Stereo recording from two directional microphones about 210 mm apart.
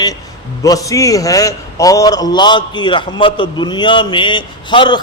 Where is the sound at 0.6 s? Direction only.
15° left (ahead or behind).